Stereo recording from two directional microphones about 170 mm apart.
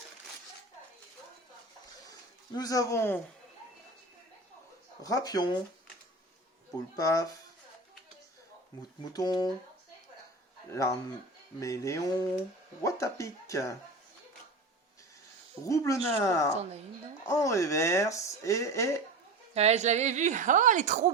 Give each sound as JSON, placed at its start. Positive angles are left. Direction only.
{"t": 2.0, "sound": "a sound", "side_deg": 20}
{"t": 5.0, "sound": "music", "side_deg": 20}
{"t": 6.7, "sound": "music", "side_deg": 20}
{"t": 9.1, "sound": "music", "side_deg": 25}
{"t": 10.7, "sound": "music", "side_deg": 20}
{"t": 12.8, "sound": "speech", "side_deg": 15}
{"t": 15.6, "sound": "speech", "side_deg": 20}
{"t": 19.5, "sound": "a woman's voice", "side_deg": -40}